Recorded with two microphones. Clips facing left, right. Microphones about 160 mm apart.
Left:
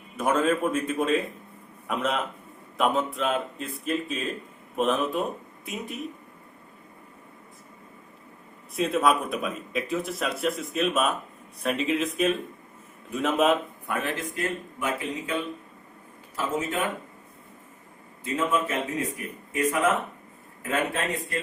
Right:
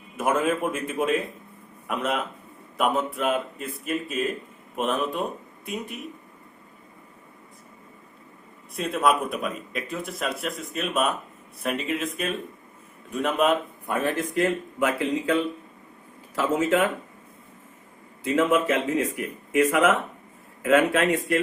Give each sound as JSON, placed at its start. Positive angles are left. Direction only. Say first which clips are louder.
{"t": 0.2, "sound": "a man's voice", "louder": "even", "side_deg": -5}
{"t": 8.7, "sound": "a man's voice", "louder": "even", "side_deg": 0}
{"t": 14.3, "sound": "a man's voice", "louder": "right 7 dB", "side_deg": -85}
{"t": 18.2, "sound": "a man's voice", "louder": "right 5 dB", "side_deg": -90}